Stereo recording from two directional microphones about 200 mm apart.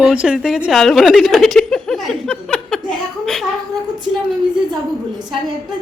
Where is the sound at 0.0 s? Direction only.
5° right (ahead or behind).